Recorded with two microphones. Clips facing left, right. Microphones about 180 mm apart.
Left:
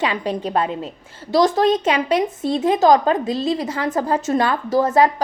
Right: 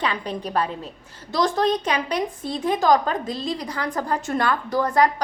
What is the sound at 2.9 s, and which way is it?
A woman's voice, 20° left (ahead or behind).